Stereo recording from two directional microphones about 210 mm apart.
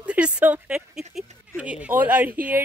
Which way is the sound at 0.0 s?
5° right (ahead or behind).